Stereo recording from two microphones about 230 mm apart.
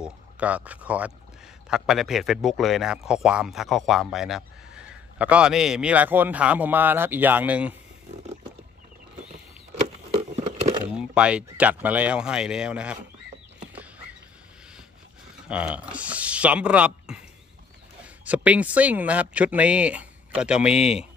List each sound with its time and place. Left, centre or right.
0.0 s speech: centre
10.1 s a sound: right
10.9 s speech: centre
15.4 s speech: centre